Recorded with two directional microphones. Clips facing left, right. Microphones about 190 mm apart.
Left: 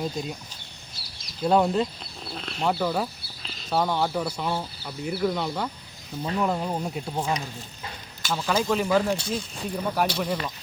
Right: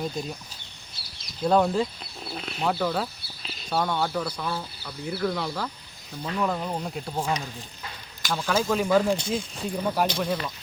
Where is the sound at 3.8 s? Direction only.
5° left (ahead or behind).